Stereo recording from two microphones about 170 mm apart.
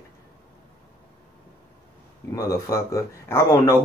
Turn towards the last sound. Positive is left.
turn(degrees=15)  # may be behind; listen again after turning